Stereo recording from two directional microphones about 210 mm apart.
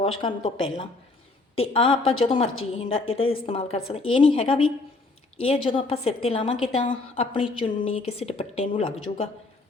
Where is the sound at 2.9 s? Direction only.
70° left (ahead or behind).